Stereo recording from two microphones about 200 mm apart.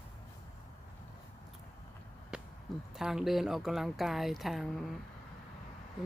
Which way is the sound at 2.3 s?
5° right (ahead or behind).